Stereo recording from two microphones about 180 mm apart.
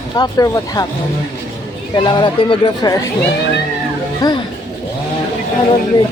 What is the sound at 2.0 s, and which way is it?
Speech, 25° left (ahead or behind).